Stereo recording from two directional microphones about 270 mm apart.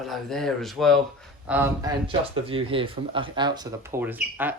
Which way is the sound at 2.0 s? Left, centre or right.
Centre.